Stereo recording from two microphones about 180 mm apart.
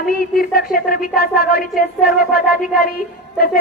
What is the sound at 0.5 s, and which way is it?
Speech, 55° left (ahead or behind).